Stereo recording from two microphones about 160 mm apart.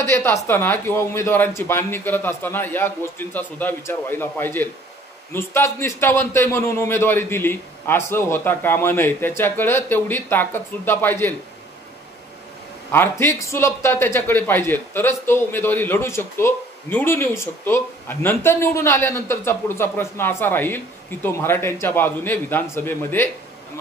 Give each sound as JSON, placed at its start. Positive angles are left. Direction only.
{"t": 0.0, "sound": "a woman's voice", "side_deg": 15}
{"t": 12.9, "sound": "a man's voice", "side_deg": 15}